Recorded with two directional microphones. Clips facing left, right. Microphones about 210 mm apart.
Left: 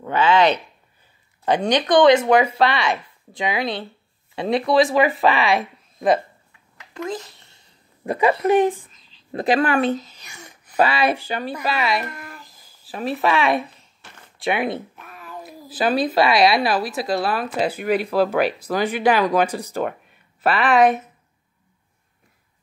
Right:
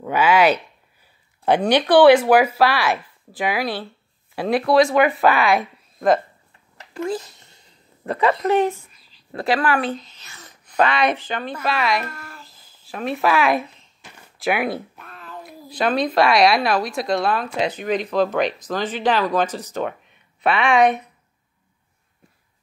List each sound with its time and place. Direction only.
0.0 s speech: 10° right (ahead or behind)
3.6 s speech: 20° left (ahead or behind)
4.6 s speech: centre (ahead or behind)
8.0 s speech: 15° left (ahead or behind)
10.0 s speech: 10° left (ahead or behind)
12.0 s babbling: 20° left (ahead or behind); by 13.8 s centre (ahead or behind)
14.4 s speech: centre (ahead or behind)
15.0 s speech: 10° left (ahead or behind)